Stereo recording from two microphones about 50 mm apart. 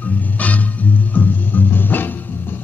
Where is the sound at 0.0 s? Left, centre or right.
Left.